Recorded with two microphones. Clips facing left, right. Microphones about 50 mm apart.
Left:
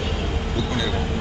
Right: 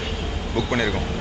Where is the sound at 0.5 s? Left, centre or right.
Right.